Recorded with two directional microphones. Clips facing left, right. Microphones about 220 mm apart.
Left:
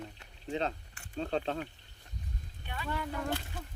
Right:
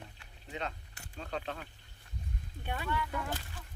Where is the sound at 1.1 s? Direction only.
35° left (ahead or behind).